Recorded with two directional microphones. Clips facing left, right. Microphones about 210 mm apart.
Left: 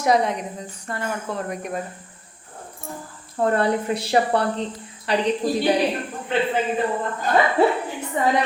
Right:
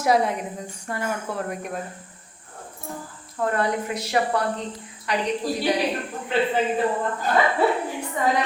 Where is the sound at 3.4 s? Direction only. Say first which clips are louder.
Left 4 dB; 30° left (ahead or behind).